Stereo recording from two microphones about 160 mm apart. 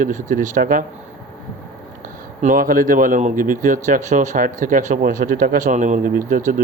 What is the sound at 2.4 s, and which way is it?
A man's voice, 60° right (ahead or behind).